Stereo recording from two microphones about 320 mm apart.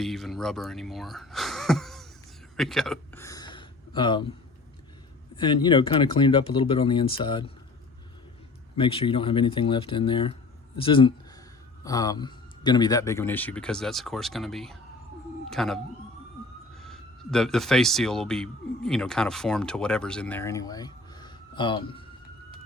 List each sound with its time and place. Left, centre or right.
0.0 s speech: centre
2.6 s a sound: centre
5.4 s speech: centre
8.7 s a man's voice: centre